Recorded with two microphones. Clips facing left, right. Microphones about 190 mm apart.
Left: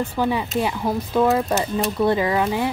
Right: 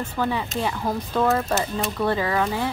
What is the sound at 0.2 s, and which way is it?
Speech, 15° left (ahead or behind).